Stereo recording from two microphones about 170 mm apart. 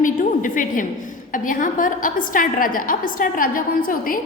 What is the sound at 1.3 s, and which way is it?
A woman's voice, 50° left (ahead or behind).